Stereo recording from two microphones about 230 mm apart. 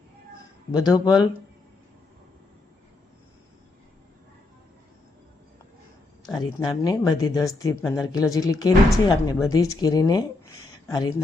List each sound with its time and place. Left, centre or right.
0.7 s speech: centre
6.4 s speech: centre